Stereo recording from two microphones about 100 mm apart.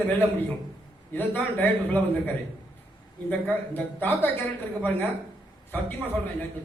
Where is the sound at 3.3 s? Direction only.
20° left (ahead or behind).